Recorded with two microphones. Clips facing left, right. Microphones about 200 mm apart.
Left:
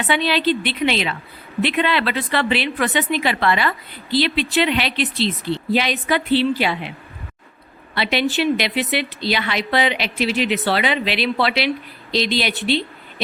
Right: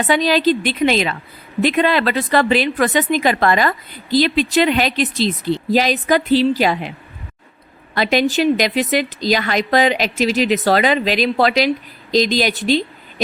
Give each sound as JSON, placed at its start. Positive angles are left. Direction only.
{"t": 0.0, "sound": "a woman's voice", "side_deg": -40}
{"t": 7.9, "sound": "a woman's voice", "side_deg": -40}
{"t": 12.6, "sound": "a sound", "side_deg": -40}